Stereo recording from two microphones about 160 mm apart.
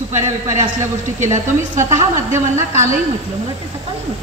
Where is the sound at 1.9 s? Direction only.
50° right (ahead or behind).